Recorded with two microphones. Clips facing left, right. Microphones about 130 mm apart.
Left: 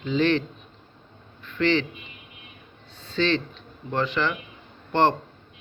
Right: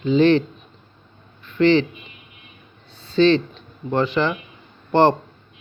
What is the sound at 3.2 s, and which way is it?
A man's voice, 20° right (ahead or behind).